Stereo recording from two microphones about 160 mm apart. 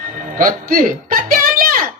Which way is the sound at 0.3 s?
60° right (ahead or behind).